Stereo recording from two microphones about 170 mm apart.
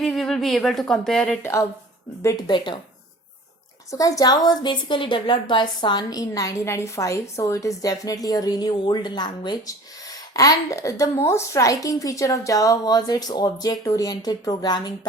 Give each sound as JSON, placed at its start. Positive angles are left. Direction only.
{"t": 0.0, "sound": "speech", "side_deg": 0}
{"t": 1.4, "sound": "a woman's voice", "side_deg": 15}
{"t": 3.9, "sound": "a woman's voice", "side_deg": 20}